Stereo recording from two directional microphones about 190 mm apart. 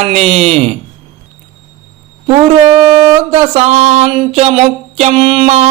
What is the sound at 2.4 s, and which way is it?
Speech, 35° right (ahead or behind).